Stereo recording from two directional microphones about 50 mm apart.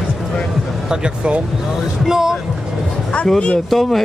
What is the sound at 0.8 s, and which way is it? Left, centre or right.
Speech, centre.